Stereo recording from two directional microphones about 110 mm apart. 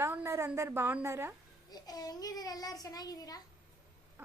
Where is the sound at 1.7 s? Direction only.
35° left (ahead or behind).